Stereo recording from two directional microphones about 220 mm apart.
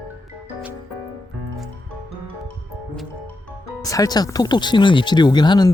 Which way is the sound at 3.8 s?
15° left (ahead or behind).